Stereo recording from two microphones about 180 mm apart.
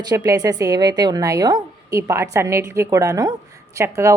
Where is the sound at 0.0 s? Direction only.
20° right (ahead or behind).